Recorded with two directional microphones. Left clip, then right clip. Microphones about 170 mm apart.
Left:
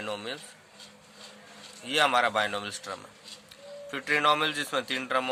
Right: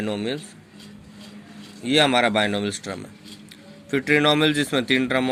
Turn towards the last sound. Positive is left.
turn(degrees=-25)  # may be behind; listen again after turning